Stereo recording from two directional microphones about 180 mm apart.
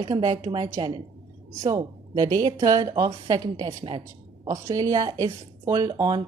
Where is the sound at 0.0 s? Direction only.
25° right (ahead or behind).